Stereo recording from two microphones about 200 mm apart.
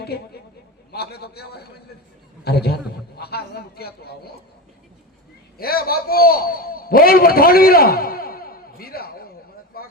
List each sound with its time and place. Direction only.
0.9 s a man's voice: 55° left (ahead or behind)
5.5 s a man's voice: 50° left (ahead or behind)
9.7 s a sound: 50° left (ahead or behind)